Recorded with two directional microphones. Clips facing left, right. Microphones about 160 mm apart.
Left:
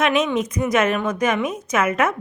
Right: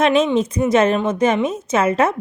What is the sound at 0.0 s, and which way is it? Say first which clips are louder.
A woman's voice: right 4 dB; 30° right (ahead or behind).